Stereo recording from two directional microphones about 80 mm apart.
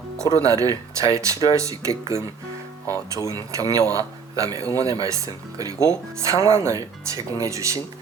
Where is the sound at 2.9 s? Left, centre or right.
Left.